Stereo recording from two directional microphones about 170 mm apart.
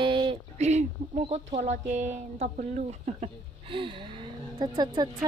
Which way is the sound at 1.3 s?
40° right (ahead or behind).